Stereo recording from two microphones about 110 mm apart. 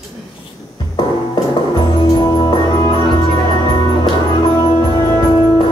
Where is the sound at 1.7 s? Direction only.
35° left (ahead or behind).